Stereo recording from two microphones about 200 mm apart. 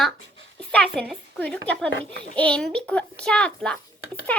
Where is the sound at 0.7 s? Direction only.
5° left (ahead or behind).